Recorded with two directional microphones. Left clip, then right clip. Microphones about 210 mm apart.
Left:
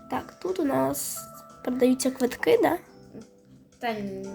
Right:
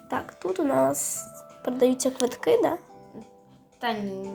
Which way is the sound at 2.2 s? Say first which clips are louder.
Left 1 dB; 40° left (ahead or behind).